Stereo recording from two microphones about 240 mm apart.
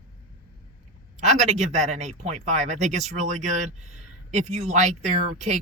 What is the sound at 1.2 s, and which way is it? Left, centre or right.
Speech, right.